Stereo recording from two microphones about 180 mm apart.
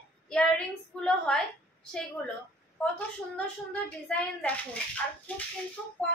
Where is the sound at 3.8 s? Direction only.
5° left (ahead or behind).